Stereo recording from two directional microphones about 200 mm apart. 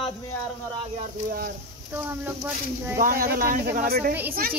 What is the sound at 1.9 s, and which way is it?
Speech, 10° right (ahead or behind).